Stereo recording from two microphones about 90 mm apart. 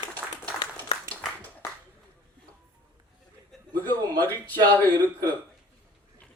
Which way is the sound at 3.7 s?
20° left (ahead or behind).